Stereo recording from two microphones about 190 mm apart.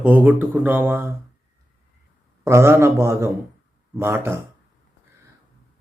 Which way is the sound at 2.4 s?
15° right (ahead or behind).